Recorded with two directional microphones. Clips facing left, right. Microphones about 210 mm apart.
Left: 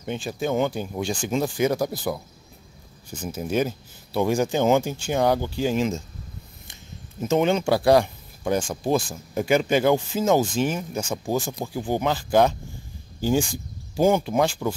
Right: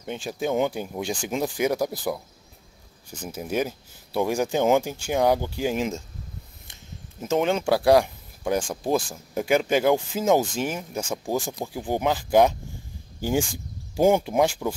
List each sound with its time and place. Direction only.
0.0 s speech: 5° right (ahead or behind)
3.3 s speech: 10° right (ahead or behind)
7.2 s speech: centre (ahead or behind)
13.9 s speech: 20° right (ahead or behind)